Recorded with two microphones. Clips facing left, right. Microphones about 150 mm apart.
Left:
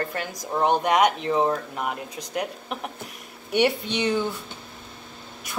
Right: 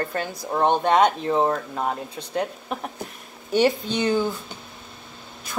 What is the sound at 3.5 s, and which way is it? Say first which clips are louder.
Speech: right 2 dB; 30° right (ahead or behind).